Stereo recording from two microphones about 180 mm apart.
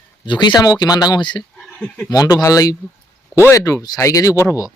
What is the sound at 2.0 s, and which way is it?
Speech, 20° left (ahead or behind).